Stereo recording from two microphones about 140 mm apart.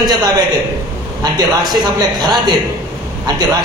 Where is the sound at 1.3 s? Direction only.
30° right (ahead or behind).